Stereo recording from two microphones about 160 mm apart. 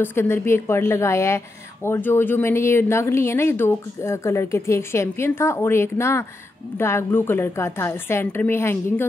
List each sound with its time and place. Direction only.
0.0 s a woman's voice: 15° left (ahead or behind)